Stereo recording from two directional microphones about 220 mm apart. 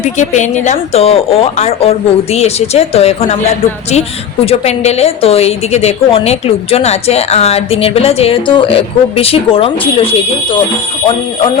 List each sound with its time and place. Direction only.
0.0 s a woman's voice: 35° left (ahead or behind)
4.4 s a woman's voice: 30° left (ahead or behind)